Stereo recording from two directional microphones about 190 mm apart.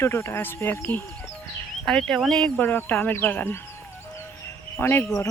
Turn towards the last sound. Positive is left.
turn(degrees=10)  # may be behind; listen again after turning